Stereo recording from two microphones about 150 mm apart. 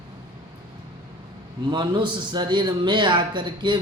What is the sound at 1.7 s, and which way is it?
Speech, 30° right (ahead or behind).